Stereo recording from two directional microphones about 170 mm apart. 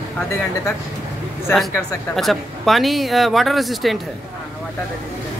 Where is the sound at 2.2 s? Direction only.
Centre (ahead or behind).